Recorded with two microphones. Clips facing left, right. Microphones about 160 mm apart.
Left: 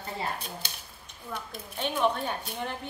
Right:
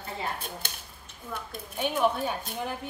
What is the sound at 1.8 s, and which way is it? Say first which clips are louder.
Speech: right 1 dB; 5° right (ahead or behind).